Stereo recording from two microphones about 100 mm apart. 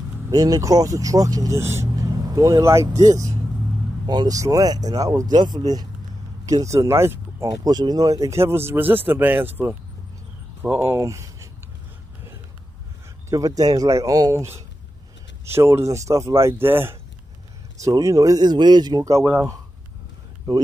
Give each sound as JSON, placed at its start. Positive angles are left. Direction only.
{"t": 0.3, "sound": "speech", "side_deg": -40}
{"t": 2.1, "sound": "speech", "side_deg": -40}
{"t": 13.3, "sound": "speech", "side_deg": -35}
{"t": 15.4, "sound": "speech", "side_deg": -25}
{"t": 17.8, "sound": "speech", "side_deg": -35}
{"t": 19.2, "sound": "speech", "side_deg": -20}